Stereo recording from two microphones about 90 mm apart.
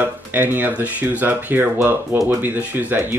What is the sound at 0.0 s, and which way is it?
Speech, 20° right (ahead or behind).